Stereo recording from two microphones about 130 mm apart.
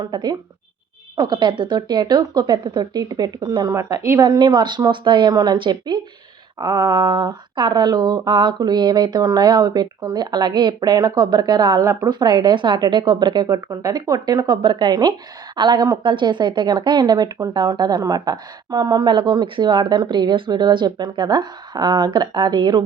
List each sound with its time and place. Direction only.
0.0 s a woman's voice: 30° right (ahead or behind)